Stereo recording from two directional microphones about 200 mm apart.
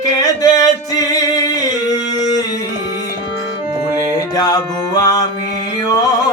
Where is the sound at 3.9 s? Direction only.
20° left (ahead or behind).